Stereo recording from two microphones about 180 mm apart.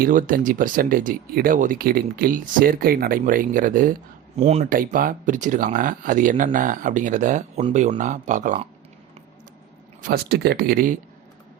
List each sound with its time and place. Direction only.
0.0 s speech: 50° right (ahead or behind)
4.4 s speech: 35° right (ahead or behind)
4.6 s speech: 50° right (ahead or behind)
10.0 s speech: 60° right (ahead or behind)